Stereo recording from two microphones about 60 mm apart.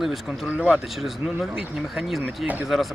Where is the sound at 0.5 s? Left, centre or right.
Centre.